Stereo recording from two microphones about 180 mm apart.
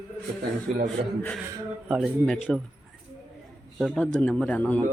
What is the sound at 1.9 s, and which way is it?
Speech, centre (ahead or behind).